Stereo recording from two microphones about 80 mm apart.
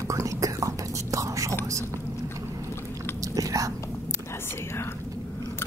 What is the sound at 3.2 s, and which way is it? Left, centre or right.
Speech, right.